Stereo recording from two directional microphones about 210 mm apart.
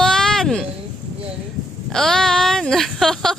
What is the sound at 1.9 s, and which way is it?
Speech, centre (ahead or behind).